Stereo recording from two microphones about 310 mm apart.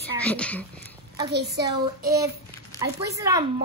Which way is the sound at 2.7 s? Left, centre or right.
Centre.